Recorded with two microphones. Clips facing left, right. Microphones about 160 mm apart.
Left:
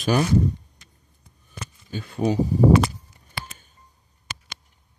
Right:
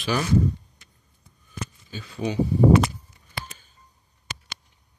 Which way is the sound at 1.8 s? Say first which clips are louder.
Left 6 dB; 50° left (ahead or behind).